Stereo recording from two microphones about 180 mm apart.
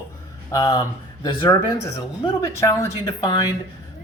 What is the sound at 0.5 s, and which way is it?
Speech, 20° left (ahead or behind).